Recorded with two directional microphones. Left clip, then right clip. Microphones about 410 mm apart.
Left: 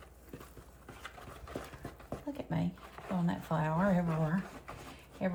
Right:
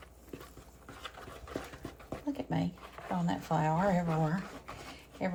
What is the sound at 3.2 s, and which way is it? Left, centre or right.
Speech, centre.